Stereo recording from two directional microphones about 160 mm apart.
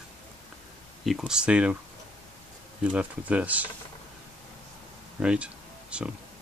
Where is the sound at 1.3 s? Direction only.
5° right (ahead or behind).